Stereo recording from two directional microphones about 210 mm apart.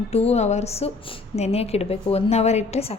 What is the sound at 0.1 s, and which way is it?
A woman's voice, 30° left (ahead or behind).